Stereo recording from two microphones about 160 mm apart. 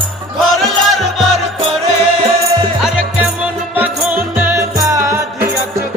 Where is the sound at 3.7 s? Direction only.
10° right (ahead or behind).